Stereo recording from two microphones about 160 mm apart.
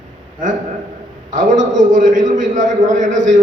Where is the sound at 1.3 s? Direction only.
55° right (ahead or behind).